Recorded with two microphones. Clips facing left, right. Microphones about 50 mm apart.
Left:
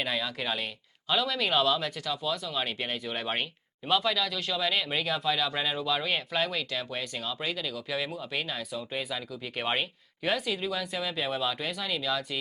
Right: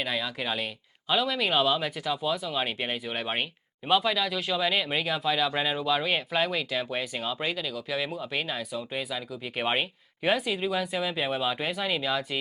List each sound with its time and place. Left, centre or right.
0.0 s speech: centre
7.5 s speech: centre